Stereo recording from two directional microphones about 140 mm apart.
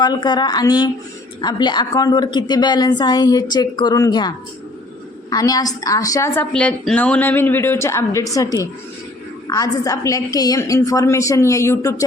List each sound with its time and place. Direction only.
0.0 s a woman's voice: 30° left (ahead or behind)
6.5 s a woman's voice: 5° left (ahead or behind); by 12.0 s 20° left (ahead or behind)